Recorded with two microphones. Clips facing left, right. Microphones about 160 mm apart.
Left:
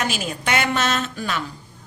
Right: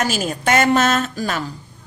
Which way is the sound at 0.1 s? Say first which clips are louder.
Right 5 dB; 45° right (ahead or behind).